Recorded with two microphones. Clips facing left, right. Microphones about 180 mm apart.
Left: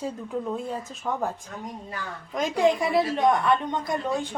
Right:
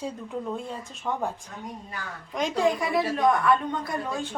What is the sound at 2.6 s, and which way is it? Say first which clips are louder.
A woman's voice: left 3 dB; 25° left (ahead or behind).